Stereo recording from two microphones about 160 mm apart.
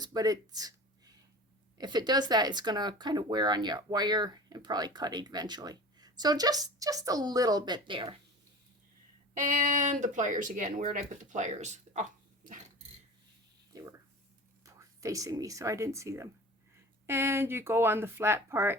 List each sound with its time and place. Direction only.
0.0 s speech: 25° right (ahead or behind)
9.3 s speech: 55° right (ahead or behind)
13.7 s a sound: 20° right (ahead or behind)
14.6 s speech: 20° right (ahead or behind)